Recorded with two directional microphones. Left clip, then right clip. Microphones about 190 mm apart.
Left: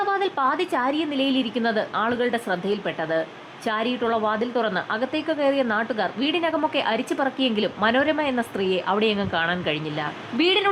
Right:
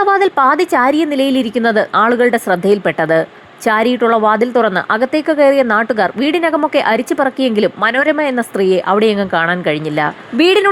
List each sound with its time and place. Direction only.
0.0 s a woman's voice: 35° right (ahead or behind)